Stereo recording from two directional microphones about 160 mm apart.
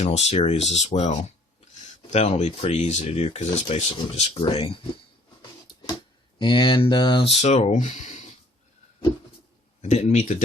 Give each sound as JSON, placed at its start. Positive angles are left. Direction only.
{"t": 0.0, "sound": "speech", "side_deg": 45}
{"t": 6.4, "sound": "speech", "side_deg": 30}
{"t": 9.9, "sound": "speech", "side_deg": 45}